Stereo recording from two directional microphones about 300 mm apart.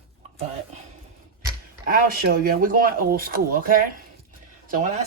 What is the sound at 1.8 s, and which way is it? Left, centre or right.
Speech, right.